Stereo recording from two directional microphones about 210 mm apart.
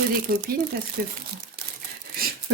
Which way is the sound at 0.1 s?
45° right (ahead or behind).